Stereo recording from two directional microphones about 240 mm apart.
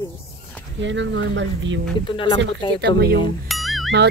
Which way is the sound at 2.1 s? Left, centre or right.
Centre.